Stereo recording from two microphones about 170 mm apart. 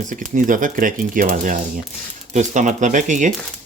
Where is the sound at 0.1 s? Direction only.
50° right (ahead or behind).